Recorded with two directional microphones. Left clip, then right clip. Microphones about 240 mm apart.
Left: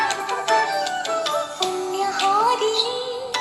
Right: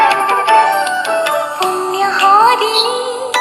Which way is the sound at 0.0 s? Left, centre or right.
Right.